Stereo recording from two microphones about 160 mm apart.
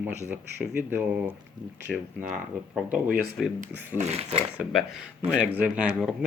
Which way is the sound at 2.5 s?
55° right (ahead or behind).